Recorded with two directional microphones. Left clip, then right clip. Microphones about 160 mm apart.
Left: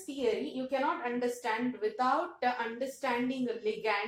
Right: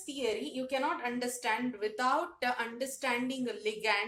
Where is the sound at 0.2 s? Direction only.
30° right (ahead or behind).